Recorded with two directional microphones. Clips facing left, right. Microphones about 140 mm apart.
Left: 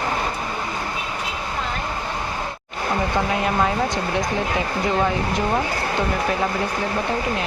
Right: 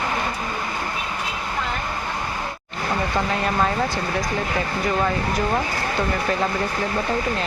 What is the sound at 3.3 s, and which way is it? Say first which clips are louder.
Speech: left 1 dB; 10° left (ahead or behind).